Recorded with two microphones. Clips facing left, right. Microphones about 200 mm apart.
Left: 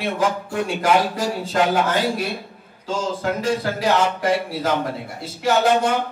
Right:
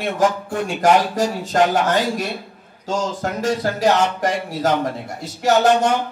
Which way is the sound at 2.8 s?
45° right (ahead or behind).